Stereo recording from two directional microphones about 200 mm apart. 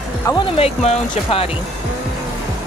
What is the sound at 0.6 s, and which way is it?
Speech, 30° left (ahead or behind).